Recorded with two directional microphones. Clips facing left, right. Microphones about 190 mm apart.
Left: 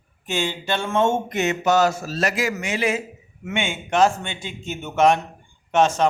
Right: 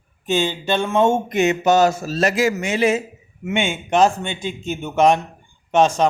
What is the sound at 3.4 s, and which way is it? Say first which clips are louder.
Speech: right 4 dB; 20° right (ahead or behind).